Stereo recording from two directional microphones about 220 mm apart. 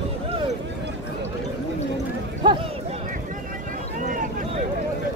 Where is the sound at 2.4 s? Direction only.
20° right (ahead or behind).